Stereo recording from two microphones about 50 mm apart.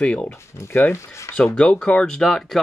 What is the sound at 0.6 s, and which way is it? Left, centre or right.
Speech, left.